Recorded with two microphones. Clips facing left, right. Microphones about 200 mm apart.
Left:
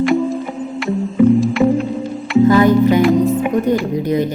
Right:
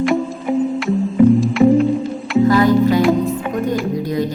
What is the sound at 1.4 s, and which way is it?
Music, centre (ahead or behind).